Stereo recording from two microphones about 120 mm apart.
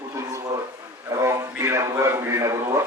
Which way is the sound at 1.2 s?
25° right (ahead or behind).